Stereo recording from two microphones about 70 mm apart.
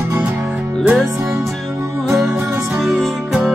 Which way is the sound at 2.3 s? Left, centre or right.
Right.